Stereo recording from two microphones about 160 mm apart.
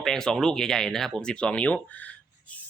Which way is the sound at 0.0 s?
5° left (ahead or behind).